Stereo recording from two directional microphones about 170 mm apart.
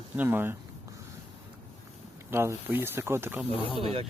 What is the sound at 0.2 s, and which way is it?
Speech, 10° right (ahead or behind).